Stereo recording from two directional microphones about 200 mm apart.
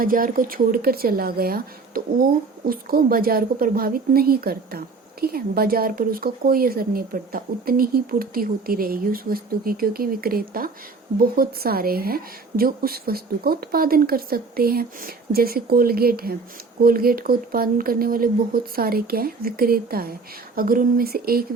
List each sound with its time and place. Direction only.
0.0 s speech: 45° right (ahead or behind)